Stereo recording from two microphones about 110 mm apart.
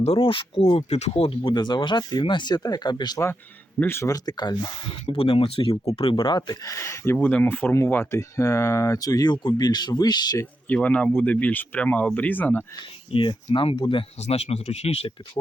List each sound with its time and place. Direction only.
0.0 s speech: 60° left (ahead or behind)
0.8 s speech: 85° left; by 1.4 s 65° left (ahead or behind)
1.5 s speech: 45° left (ahead or behind)
3.8 s speech: 20° left (ahead or behind); by 4.9 s 40° left (ahead or behind)
5.0 s speech: 60° left (ahead or behind); by 10.4 s 40° left (ahead or behind)
10.7 s speech: 15° left (ahead or behind)
13.1 s speech: 50° left (ahead or behind)
14.2 s speech: 70° left (ahead or behind)